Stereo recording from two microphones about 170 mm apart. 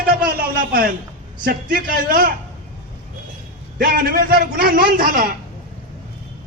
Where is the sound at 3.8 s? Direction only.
60° right (ahead or behind).